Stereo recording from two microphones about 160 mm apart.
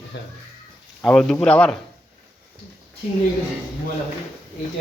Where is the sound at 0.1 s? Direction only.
90° left.